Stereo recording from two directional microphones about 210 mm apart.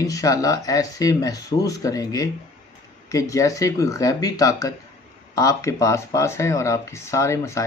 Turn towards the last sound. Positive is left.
turn(degrees=15)  # may be behind; listen again after turning